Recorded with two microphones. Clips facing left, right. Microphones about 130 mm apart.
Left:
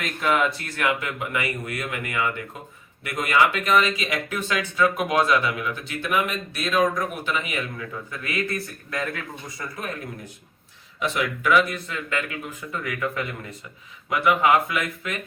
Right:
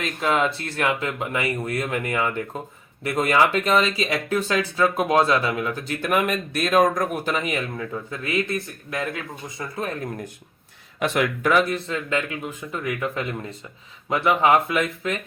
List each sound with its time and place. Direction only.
0.0 s speech: 25° right (ahead or behind)
8.1 s speech: 25° right (ahead or behind)
11.0 s speech: 55° right (ahead or behind)
11.4 s speech: 35° right (ahead or behind)